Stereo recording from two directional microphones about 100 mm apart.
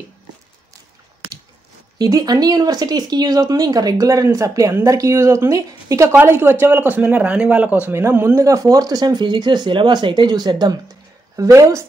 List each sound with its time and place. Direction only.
2.0 s a man's voice: 40° right (ahead or behind); by 8.4 s 20° right (ahead or behind)
8.4 s speech: 35° right (ahead or behind)
11.3 s speech: 35° right (ahead or behind)